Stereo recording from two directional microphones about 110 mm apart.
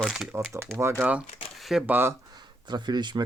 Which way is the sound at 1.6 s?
Centre (ahead or behind).